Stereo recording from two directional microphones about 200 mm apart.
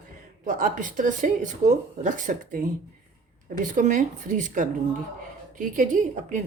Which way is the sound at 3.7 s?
40° right (ahead or behind).